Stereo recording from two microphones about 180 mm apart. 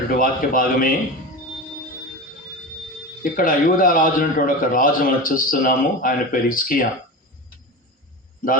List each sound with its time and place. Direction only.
0.1 s a man's voice: 50° left (ahead or behind)
3.3 s a man's voice: 50° left (ahead or behind)